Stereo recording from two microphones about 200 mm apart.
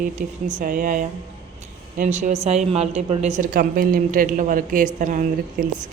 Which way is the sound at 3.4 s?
45° right (ahead or behind).